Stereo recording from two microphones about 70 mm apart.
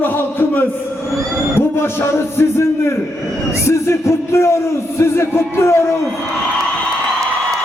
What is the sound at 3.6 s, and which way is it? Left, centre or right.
Music, left.